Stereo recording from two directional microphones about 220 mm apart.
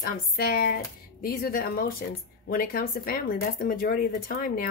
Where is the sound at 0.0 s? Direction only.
40° left (ahead or behind).